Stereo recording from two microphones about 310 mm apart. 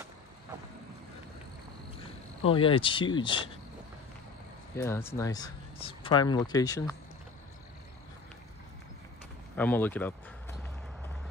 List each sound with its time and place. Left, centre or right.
2.0 s speech: centre
4.7 s speech: centre
9.6 s speech: centre